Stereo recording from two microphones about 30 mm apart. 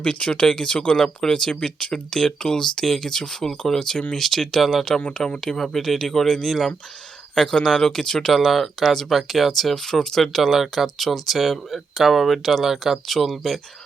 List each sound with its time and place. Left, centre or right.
0.0 s speech: left
0.4 s speech: left; by 6.7 s centre
7.3 s speech: left
8.4 s speech: centre
9.7 s speech: centre
10.2 s speech: centre